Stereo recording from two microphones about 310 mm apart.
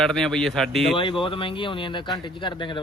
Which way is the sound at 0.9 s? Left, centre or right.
Centre.